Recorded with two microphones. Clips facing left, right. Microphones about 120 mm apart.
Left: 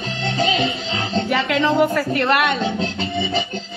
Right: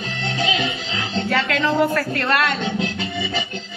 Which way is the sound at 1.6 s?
15° left (ahead or behind).